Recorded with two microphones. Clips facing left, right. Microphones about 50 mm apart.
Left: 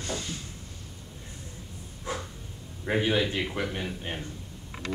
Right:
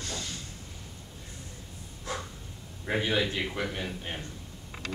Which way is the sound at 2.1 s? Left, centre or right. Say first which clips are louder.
Left 2 dB; centre.